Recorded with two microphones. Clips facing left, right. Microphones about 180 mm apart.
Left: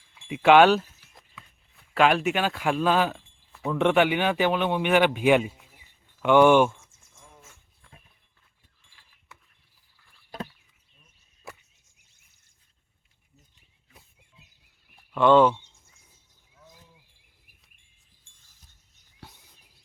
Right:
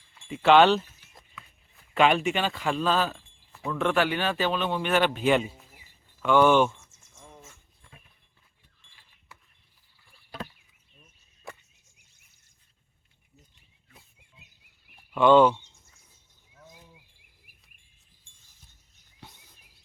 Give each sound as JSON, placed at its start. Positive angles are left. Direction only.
{"t": 0.3, "sound": "a man's voice", "side_deg": 10}
{"t": 1.7, "sound": "a man's voice", "side_deg": 0}
{"t": 15.1, "sound": "speech", "side_deg": 0}